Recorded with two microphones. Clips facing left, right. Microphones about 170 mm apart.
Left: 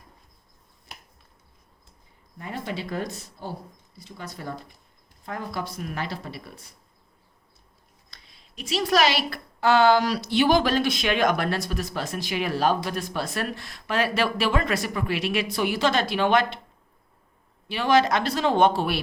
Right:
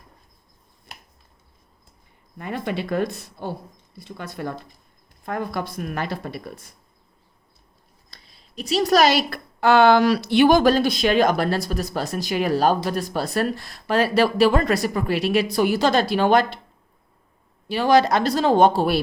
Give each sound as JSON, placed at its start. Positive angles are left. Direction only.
{"t": 2.4, "sound": "speech", "side_deg": -60}
{"t": 8.1, "sound": "speech", "side_deg": -35}
{"t": 17.7, "sound": "speech", "side_deg": -40}